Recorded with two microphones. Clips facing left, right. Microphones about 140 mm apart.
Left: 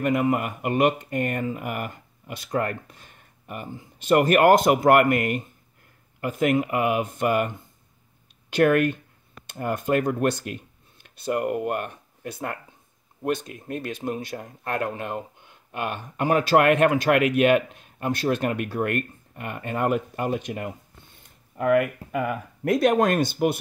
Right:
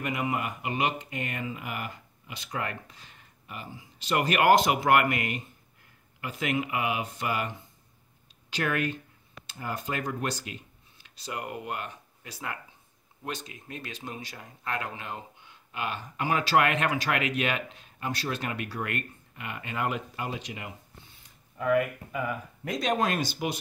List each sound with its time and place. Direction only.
0.0 s speech: 45° left (ahead or behind)